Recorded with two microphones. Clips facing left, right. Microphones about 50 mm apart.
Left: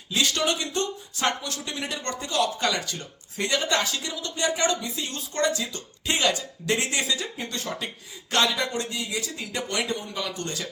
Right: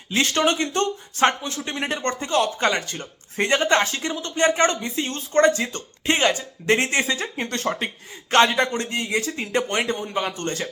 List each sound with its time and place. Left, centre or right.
0.1 s speech: right